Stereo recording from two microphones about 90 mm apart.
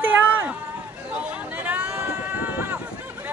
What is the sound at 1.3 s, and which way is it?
Hubbub, 15° right (ahead or behind).